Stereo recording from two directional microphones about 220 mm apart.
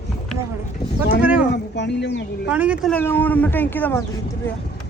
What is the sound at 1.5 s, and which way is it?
Speech, 50° left (ahead or behind).